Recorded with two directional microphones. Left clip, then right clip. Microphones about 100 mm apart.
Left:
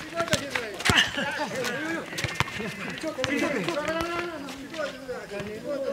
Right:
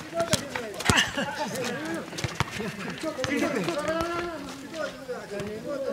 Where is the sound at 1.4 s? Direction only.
15° left (ahead or behind).